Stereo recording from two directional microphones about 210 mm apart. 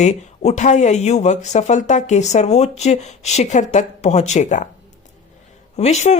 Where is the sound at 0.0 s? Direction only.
35° left (ahead or behind).